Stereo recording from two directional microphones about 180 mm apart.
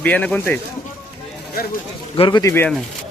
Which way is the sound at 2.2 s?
20° left (ahead or behind).